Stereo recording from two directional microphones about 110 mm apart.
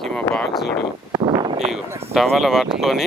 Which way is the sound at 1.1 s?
40° right (ahead or behind).